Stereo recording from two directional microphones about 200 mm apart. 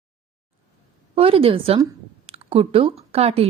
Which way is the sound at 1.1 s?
30° right (ahead or behind).